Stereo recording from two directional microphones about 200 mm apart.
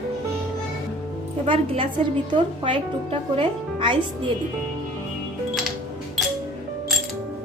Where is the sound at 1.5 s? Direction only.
25° right (ahead or behind).